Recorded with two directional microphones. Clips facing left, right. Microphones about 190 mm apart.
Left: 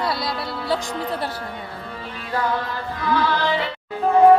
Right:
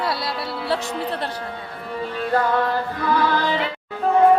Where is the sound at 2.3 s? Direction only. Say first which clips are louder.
Right 4 dB; 50° right (ahead or behind).